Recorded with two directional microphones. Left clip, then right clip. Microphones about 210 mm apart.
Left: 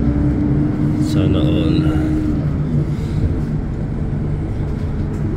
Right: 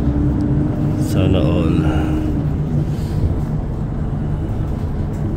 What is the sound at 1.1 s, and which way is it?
Vehicle, 25° right (ahead or behind).